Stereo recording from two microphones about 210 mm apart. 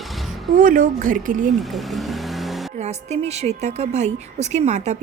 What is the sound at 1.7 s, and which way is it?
Vehicle, centre (ahead or behind).